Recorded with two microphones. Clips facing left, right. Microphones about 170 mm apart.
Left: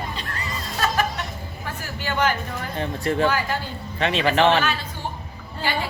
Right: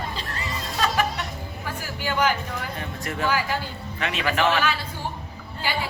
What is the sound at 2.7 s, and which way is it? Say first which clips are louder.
Speech: left 7 dB; 30° left (ahead or behind).